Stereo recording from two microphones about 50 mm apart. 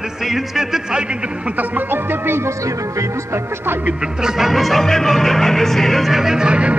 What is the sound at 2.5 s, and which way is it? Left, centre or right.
Music, right.